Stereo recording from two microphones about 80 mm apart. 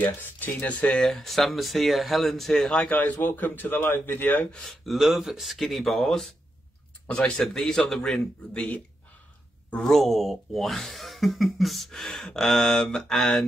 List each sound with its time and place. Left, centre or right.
0.0 s speech: left; by 2.9 s centre
2.9 s speech: left
4.5 s a man's voice: centre
4.9 s a man's voice: centre
9.7 s speech: centre